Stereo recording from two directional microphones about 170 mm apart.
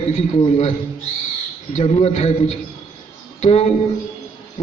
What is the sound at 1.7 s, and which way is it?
A man's voice, 40° left (ahead or behind).